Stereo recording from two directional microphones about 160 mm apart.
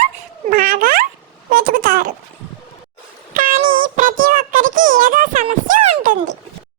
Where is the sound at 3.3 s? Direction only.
60° right (ahead or behind).